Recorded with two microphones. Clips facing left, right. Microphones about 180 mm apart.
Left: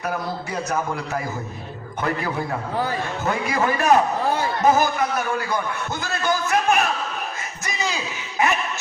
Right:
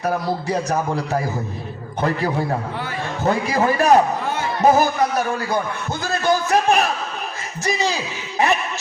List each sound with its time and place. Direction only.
0.0 s a man's voice: 35° right (ahead or behind)